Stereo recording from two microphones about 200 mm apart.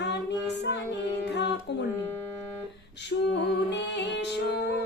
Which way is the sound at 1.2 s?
60° left (ahead or behind).